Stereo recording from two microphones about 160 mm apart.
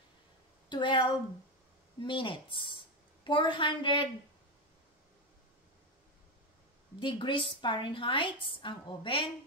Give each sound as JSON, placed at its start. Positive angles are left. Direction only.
{"t": 0.7, "sound": "a woman's voice", "side_deg": 30}
{"t": 7.0, "sound": "a woman's voice", "side_deg": 30}